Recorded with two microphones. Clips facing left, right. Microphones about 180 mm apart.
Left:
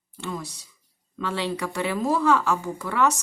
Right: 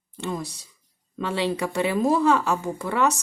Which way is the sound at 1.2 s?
20° right (ahead or behind).